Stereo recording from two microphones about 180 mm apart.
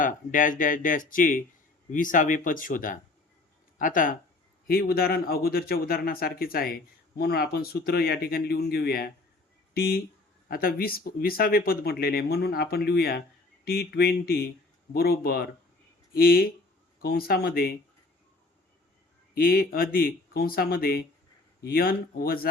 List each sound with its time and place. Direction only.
0.0 s speech: 50° left (ahead or behind)
10.5 s speech: 55° left (ahead or behind)
19.3 s speech: 55° left (ahead or behind)